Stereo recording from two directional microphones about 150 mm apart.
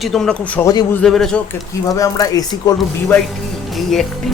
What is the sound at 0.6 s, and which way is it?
Speech, 25° left (ahead or behind).